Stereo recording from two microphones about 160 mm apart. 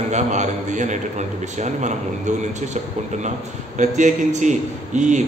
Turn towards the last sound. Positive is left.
turn(degrees=-50)  # may be behind; listen again after turning